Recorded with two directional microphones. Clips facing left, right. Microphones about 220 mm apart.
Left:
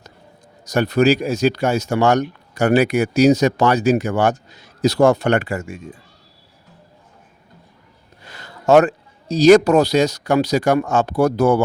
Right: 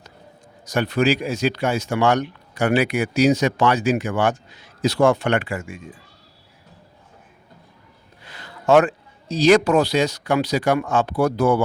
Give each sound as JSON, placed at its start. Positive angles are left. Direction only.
{"t": 0.6, "sound": "speech", "side_deg": 40}
{"t": 8.2, "sound": "speech", "side_deg": 40}